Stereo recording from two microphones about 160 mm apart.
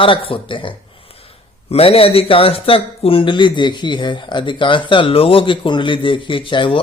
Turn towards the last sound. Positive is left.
turn(degrees=30)  # may be behind; listen again after turning